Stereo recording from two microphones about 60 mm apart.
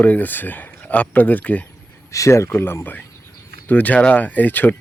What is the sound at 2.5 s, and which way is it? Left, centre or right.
Speech, left.